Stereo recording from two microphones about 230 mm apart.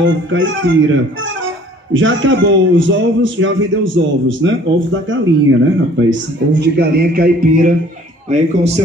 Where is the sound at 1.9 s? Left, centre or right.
Right.